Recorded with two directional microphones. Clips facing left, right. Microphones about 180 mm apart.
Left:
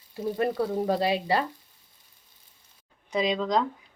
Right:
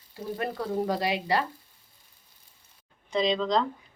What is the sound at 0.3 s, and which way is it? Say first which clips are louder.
Speech: left 3 dB; 20° left (ahead or behind).